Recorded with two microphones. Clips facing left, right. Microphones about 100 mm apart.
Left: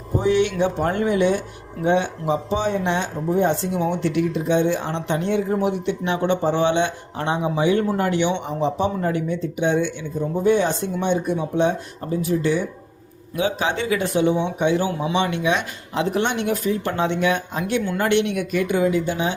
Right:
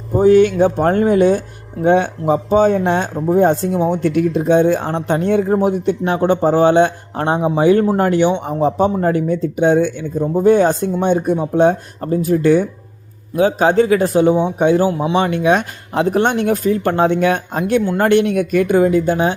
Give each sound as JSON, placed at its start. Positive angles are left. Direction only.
{"t": 0.2, "sound": "speech", "side_deg": -45}